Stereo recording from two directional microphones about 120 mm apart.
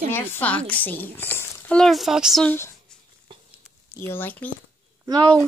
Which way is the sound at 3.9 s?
20° left (ahead or behind).